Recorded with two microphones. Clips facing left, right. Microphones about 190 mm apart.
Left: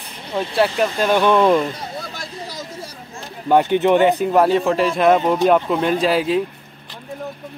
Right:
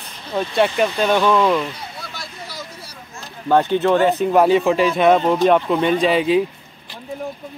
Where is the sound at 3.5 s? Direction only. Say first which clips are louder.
Left 1 dB; 15° left (ahead or behind).